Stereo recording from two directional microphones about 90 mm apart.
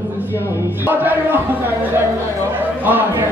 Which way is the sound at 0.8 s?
20° right (ahead or behind).